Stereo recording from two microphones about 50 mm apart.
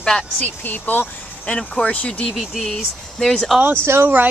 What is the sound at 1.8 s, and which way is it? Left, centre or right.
Speech, left.